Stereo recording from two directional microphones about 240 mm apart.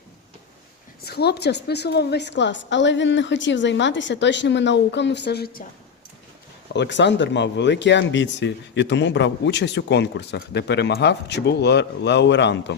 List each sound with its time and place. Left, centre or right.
1.0 s speech: left
6.7 s speech: left